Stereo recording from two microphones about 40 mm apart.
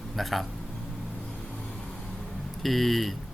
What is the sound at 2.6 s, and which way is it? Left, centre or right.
Speech, centre.